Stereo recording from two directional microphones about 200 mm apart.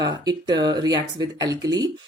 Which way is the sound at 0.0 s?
20° right (ahead or behind).